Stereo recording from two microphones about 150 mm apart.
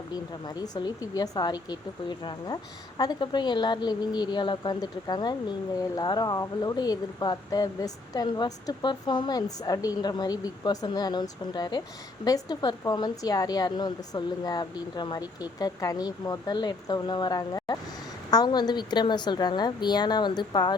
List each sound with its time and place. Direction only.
0.1 s speech: 25° left (ahead or behind)